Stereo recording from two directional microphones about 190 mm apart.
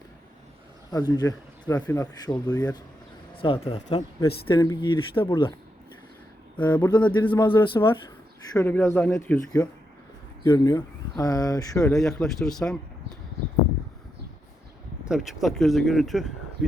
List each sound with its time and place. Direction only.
0.9 s speech: 20° left (ahead or behind)
4.3 s speech: 20° left (ahead or behind)
6.6 s speech: 20° left (ahead or behind)
11.8 s speech: 5° left (ahead or behind)
15.0 s speech: 5° right (ahead or behind)